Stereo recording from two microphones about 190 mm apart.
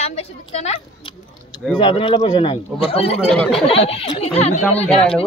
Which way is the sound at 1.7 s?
25° left (ahead or behind).